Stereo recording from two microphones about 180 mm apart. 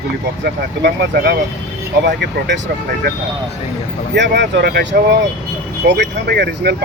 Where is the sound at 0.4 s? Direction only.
65° right (ahead or behind).